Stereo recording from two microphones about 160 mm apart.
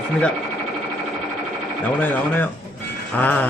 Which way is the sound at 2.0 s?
10° left (ahead or behind).